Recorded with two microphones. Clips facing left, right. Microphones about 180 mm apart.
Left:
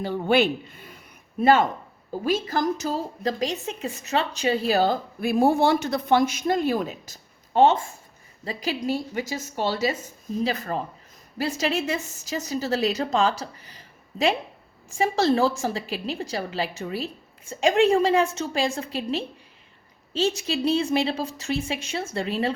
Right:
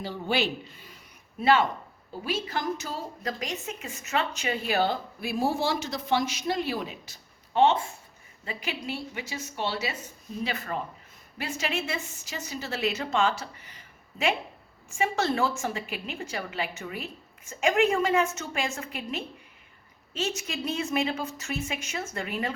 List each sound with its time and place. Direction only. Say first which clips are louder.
0.0 s a woman's voice: left 7 dB; 55° left (ahead or behind); by 22.5 s 30° left (ahead or behind)